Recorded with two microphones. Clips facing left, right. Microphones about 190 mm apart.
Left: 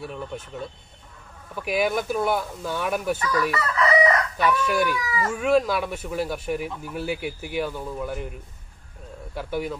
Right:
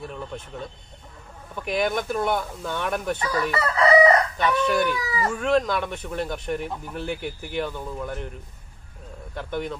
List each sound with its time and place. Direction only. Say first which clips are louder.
0.0 s speech: left 1 dB; 5° left (ahead or behind)
3.2 s chicken: even; 30° right (ahead or behind)
4.4 s speech: even; 5° left (ahead or behind)
5.0 s speech: even; 35° right (ahead or behind)
5.3 s speech: left 2 dB; 5° left (ahead or behind)